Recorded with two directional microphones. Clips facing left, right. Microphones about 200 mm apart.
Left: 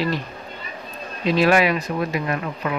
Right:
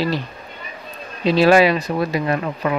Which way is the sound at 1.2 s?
30° right (ahead or behind).